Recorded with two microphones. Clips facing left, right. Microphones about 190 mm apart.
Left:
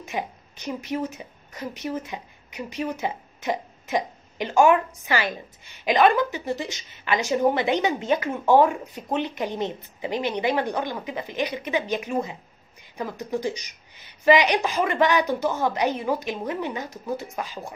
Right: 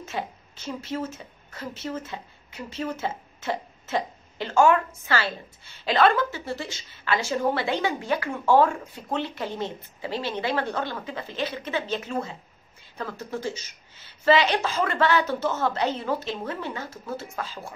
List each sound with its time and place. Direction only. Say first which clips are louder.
0.0 s a woman's voice: left 2 dB; 15° left (ahead or behind)